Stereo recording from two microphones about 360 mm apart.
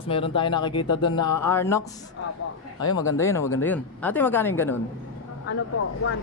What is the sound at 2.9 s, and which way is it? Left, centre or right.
Speech, centre.